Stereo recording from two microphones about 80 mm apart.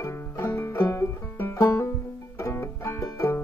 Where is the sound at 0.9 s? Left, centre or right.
Left.